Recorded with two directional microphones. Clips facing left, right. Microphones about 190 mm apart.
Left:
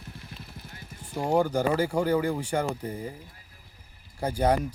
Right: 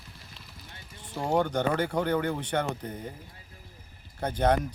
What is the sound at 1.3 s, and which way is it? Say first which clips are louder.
Speech: left 2 dB; 10° left (ahead or behind).